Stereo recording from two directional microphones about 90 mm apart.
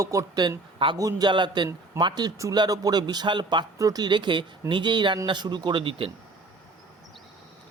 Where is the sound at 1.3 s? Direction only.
60° right (ahead or behind).